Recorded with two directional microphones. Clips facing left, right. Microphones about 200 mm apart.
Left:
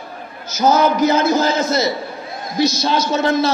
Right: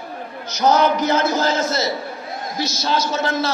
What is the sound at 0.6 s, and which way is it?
A man's voice, 5° left (ahead or behind).